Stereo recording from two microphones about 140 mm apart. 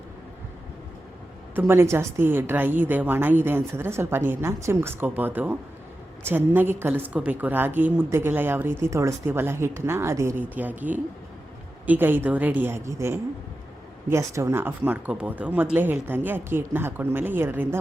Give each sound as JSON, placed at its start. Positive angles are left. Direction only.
{"t": 1.5, "sound": "a woman's voice", "side_deg": -15}